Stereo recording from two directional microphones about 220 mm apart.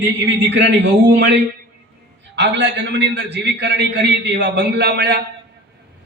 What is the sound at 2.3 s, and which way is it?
A man's voice, 50° right (ahead or behind).